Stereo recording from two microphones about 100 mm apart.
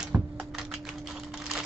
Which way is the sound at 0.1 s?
15° right (ahead or behind).